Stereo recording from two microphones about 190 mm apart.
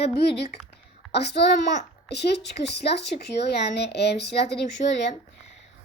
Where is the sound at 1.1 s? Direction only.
60° left (ahead or behind).